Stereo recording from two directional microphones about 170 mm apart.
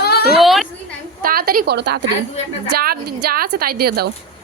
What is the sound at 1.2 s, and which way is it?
Speech, 60° right (ahead or behind).